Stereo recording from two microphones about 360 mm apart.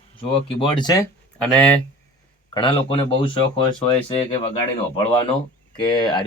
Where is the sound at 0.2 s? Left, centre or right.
Centre.